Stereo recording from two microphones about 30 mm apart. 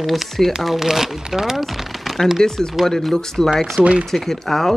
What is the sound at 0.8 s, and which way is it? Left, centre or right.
Speech, centre.